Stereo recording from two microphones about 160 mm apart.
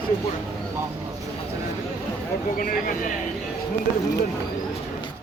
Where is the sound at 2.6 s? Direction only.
60° left (ahead or behind).